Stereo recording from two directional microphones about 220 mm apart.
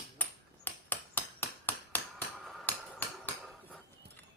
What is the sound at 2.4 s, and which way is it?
Hammer, 10° left (ahead or behind).